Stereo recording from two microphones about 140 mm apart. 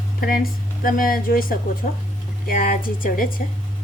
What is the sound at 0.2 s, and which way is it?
A woman's voice, 90° left.